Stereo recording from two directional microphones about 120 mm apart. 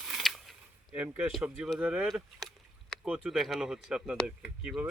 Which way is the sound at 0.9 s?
10° right (ahead or behind).